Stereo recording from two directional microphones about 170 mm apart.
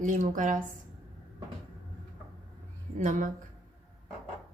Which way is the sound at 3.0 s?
50° right (ahead or behind).